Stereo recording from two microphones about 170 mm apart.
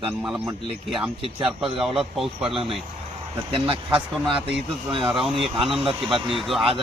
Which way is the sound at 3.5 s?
35° right (ahead or behind).